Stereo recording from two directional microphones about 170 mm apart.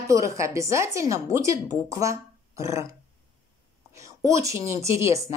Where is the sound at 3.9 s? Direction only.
20° right (ahead or behind).